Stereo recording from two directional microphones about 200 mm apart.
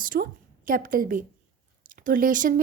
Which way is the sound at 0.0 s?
45° right (ahead or behind).